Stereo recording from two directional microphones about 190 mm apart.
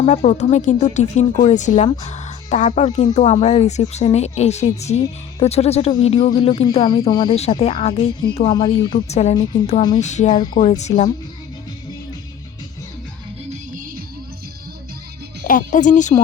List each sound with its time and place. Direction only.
0.0 s speech: 35° left (ahead or behind)
7.3 s speech: 35° left (ahead or behind)
9.0 s speech: 35° left (ahead or behind)
10.4 s speech: 25° left (ahead or behind)
13.5 s music: 45° right (ahead or behind)
15.4 s speech: 45° left (ahead or behind)